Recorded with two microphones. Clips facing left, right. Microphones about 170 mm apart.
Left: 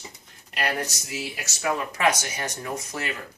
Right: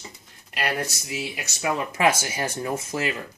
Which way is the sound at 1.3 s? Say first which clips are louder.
Even; 15° right (ahead or behind).